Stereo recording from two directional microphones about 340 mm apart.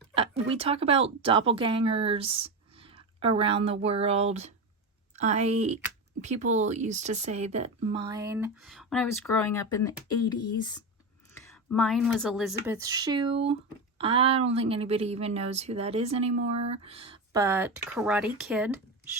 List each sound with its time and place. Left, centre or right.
0.1 s a sound: centre
0.5 s speech: centre
11.3 s speech: centre